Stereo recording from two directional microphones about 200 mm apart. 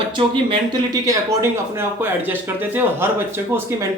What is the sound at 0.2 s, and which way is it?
Speech, 25° right (ahead or behind).